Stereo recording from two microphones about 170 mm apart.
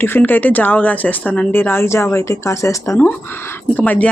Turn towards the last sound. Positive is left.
turn(degrees=10)  # may be behind; listen again after turning